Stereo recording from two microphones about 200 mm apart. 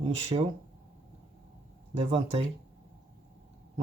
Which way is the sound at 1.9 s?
25° right (ahead or behind).